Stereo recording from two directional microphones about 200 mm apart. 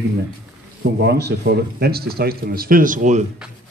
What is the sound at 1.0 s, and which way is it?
Speech, 55° right (ahead or behind).